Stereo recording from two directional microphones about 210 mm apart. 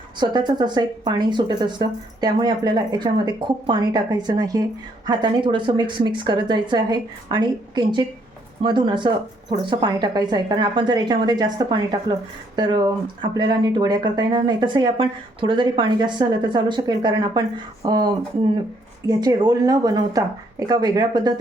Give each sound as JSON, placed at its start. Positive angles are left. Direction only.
{"t": 0.2, "sound": "speech", "side_deg": -20}